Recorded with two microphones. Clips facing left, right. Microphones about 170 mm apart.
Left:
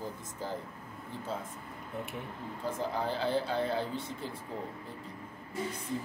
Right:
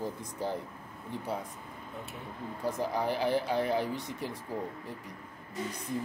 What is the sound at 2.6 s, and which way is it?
Speech, 15° right (ahead or behind).